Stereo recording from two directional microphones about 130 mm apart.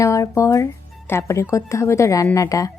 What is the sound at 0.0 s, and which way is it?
Speech, 25° left (ahead or behind).